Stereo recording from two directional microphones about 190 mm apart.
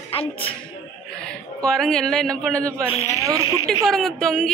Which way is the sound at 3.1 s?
15° right (ahead or behind).